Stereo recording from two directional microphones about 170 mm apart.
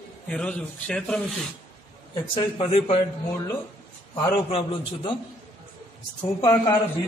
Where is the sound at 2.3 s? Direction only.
35° left (ahead or behind).